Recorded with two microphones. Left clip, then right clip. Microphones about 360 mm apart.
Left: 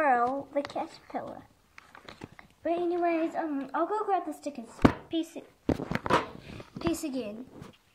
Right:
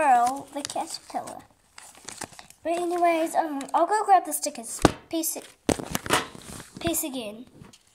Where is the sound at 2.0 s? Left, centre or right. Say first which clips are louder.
Right 9 dB; right.